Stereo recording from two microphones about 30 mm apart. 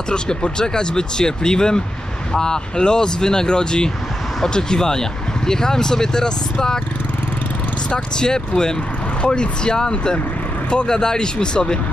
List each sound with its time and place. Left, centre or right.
0.1 s speech: left
8.2 s speech: left